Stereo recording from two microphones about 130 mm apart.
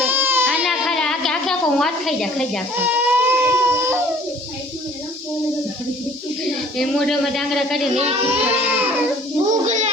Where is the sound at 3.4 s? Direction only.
20° right (ahead or behind).